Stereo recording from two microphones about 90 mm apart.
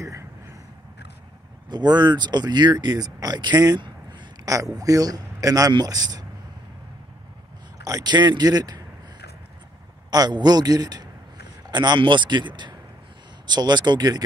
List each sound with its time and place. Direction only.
1.7 s speech: 55° right (ahead or behind)
4.5 s a man's voice: 40° right (ahead or behind)
7.8 s speech: 45° right (ahead or behind)
10.1 s a man's voice: 50° right (ahead or behind)